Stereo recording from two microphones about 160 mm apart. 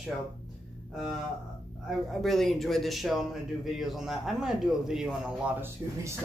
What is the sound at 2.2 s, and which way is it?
Speech, centre (ahead or behind).